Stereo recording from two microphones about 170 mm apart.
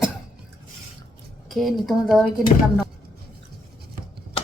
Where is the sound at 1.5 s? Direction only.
Centre (ahead or behind).